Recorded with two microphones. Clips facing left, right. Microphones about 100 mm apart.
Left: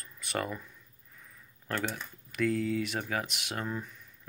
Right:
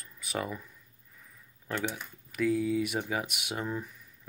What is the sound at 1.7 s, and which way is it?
Speech, 15° right (ahead or behind).